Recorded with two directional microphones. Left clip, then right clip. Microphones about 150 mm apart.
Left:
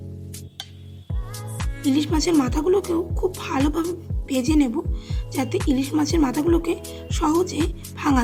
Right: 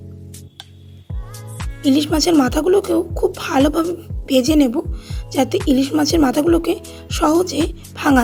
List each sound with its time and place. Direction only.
1.9 s a woman's voice: 40° right (ahead or behind)